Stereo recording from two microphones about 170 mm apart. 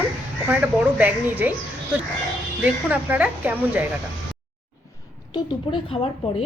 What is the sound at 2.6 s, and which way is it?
A woman's voice, 10° right (ahead or behind).